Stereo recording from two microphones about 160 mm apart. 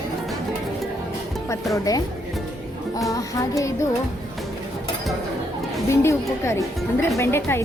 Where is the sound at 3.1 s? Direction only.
20° left (ahead or behind).